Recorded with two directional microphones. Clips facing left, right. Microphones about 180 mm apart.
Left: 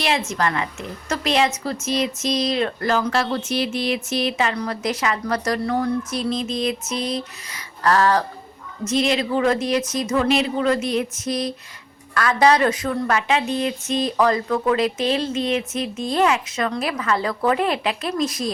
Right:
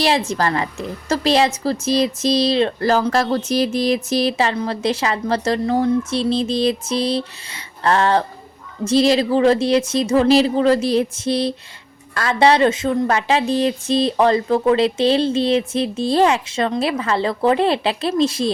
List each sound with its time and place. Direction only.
0.0 s a woman's voice: 35° right (ahead or behind)